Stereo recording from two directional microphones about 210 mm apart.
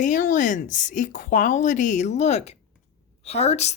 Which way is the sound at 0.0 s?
40° left (ahead or behind).